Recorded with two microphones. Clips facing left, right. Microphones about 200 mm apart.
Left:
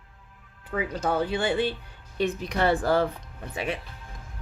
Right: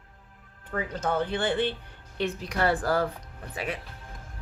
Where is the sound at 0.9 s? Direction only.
10° left (ahead or behind).